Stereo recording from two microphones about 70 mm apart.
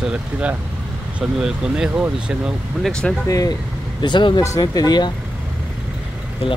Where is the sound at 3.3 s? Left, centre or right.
Left.